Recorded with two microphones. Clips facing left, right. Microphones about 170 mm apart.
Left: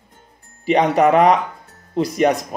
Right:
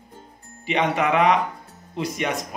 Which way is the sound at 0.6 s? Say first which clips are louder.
Left 7 dB; 40° left (ahead or behind).